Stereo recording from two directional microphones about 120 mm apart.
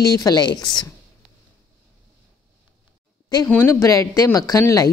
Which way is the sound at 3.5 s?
20° left (ahead or behind).